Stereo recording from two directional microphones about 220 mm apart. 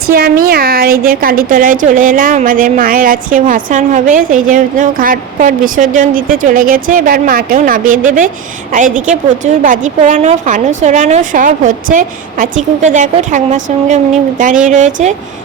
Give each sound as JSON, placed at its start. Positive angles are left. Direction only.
{"t": 0.1, "sound": "a woman's voice", "side_deg": -40}